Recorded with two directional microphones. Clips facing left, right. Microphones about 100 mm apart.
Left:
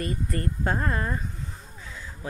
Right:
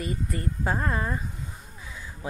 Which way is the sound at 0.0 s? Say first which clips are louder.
Left 1 dB; 5° right (ahead or behind).